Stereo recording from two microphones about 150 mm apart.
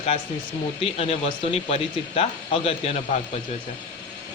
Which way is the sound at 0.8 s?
40° left (ahead or behind).